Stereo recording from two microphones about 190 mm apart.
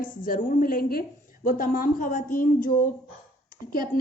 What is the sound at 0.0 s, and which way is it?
A woman's voice, 45° left (ahead or behind).